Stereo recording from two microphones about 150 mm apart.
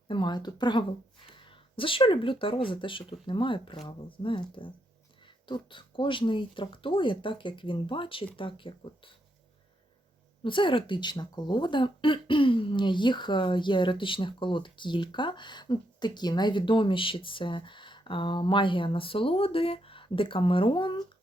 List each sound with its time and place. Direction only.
0.1 s speech: 30° left (ahead or behind)
10.4 s speech: 35° left (ahead or behind)